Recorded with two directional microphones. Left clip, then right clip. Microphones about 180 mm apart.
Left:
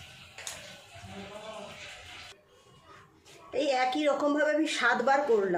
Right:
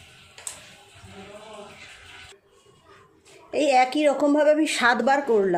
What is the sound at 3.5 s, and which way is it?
A woman's voice, 45° right (ahead or behind).